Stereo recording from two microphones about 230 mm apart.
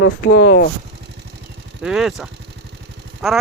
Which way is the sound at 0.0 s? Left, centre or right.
Left.